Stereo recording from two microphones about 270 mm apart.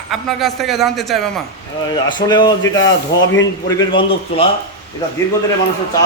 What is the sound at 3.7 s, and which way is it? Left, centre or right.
Speech, centre.